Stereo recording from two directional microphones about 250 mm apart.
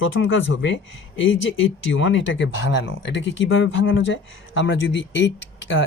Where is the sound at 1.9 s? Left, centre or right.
Left.